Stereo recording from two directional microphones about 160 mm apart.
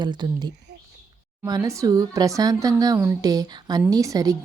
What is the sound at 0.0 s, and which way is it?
Speech, 30° right (ahead or behind).